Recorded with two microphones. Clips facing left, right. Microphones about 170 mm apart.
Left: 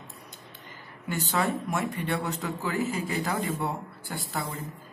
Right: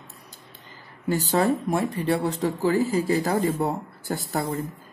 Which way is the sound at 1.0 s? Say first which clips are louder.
Right 6 dB; 35° right (ahead or behind).